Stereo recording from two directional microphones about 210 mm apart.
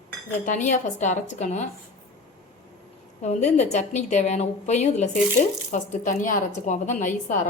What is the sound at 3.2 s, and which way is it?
A woman's voice, 30° left (ahead or behind).